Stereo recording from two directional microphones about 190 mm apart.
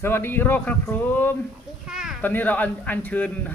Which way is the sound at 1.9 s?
5° right (ahead or behind).